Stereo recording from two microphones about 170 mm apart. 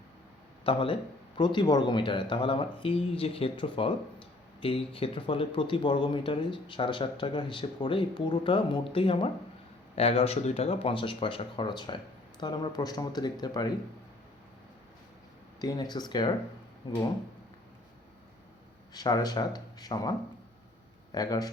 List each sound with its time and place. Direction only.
0.6 s speech: 30° left (ahead or behind)
15.6 s speech: 25° left (ahead or behind)
18.9 s a man's voice: 20° left (ahead or behind)